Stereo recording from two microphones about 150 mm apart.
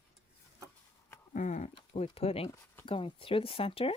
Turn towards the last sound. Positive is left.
turn(degrees=40)  # may be behind; listen again after turning